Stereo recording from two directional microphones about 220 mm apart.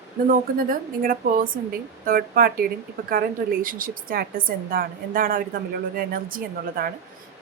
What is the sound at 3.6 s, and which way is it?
A woman's voice, 40° right (ahead or behind).